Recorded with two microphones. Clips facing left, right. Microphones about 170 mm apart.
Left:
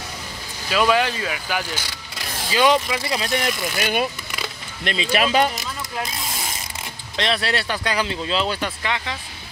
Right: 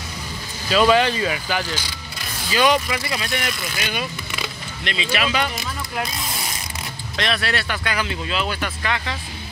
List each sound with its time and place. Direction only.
0.7 s speech: 5° left (ahead or behind)
2.5 s speech: 20° left (ahead or behind)
3.7 s speech: 50° left (ahead or behind)
7.2 s speech: 30° left (ahead or behind)